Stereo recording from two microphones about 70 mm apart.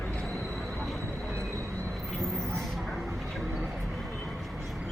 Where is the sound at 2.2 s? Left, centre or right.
Centre.